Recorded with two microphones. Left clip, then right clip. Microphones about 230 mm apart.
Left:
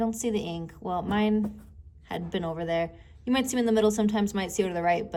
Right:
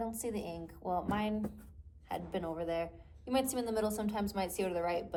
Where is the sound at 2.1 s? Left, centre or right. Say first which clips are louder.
Left 6 dB; left.